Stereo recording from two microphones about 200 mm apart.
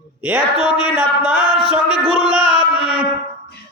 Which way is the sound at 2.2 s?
5° right (ahead or behind).